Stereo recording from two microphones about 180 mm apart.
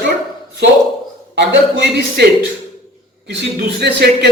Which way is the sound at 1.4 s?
75° right (ahead or behind).